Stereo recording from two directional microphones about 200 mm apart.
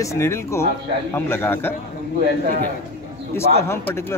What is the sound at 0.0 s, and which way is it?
Speech, 15° left (ahead or behind).